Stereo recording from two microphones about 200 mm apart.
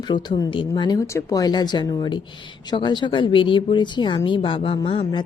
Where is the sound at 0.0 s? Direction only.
20° left (ahead or behind).